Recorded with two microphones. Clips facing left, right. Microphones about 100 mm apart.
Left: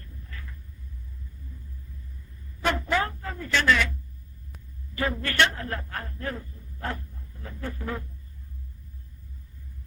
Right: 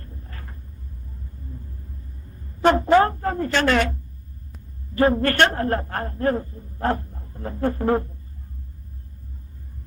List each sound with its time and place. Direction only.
0.0 s vehicle: 40° right (ahead or behind)
2.3 s a sound: 45° right (ahead or behind)
4.9 s a man's voice: 45° right (ahead or behind)